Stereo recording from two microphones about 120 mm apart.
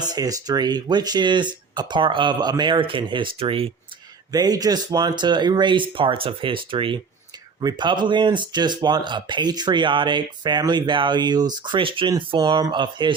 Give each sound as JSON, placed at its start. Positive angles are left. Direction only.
{"t": 0.0, "sound": "speech", "side_deg": -30}
{"t": 4.3, "sound": "speech", "side_deg": -30}